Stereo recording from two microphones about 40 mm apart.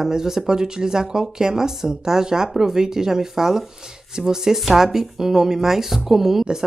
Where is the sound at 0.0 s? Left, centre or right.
Centre.